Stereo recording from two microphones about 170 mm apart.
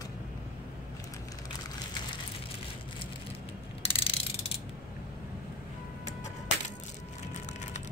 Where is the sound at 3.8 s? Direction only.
35° left (ahead or behind).